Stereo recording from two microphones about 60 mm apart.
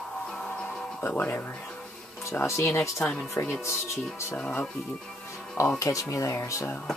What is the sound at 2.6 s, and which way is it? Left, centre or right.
Speech, left.